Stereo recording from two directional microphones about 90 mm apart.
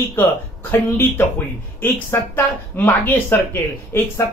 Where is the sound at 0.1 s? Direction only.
25° left (ahead or behind).